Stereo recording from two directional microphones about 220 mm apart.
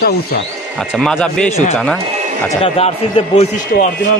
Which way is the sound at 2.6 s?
25° left (ahead or behind).